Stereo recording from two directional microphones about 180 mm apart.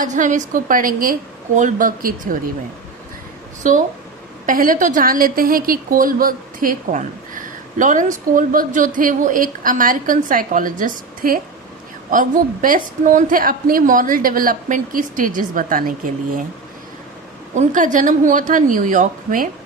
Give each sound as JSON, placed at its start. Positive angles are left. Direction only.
{"t": 0.0, "sound": "a woman's voice", "side_deg": -45}
{"t": 3.6, "sound": "a woman's voice", "side_deg": -45}
{"t": 17.5, "sound": "a woman's voice", "side_deg": -45}